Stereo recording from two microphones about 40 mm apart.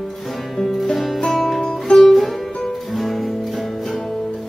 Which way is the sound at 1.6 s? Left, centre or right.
Centre.